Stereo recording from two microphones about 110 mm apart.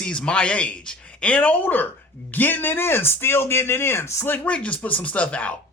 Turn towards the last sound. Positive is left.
turn(degrees=10)  # may be behind; listen again after turning